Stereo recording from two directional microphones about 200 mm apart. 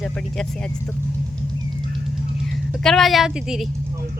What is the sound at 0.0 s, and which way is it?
Speech, 5° left (ahead or behind).